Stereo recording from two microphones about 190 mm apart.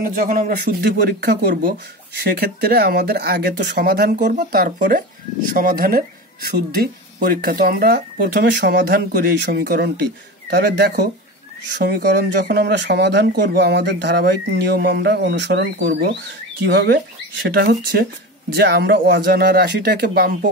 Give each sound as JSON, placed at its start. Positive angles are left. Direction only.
{"t": 0.0, "sound": "speech", "side_deg": -50}